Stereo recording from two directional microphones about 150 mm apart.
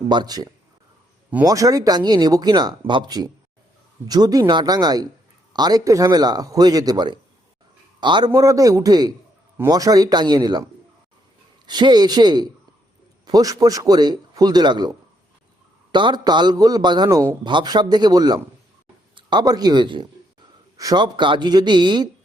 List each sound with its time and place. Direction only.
0.1 s a man's voice: 30° right (ahead or behind)
1.5 s a man's voice: 25° right (ahead or behind)